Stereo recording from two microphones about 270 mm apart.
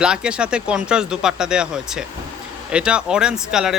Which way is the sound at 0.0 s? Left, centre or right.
Centre.